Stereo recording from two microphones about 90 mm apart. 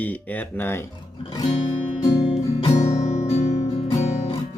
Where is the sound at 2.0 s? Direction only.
40° left (ahead or behind).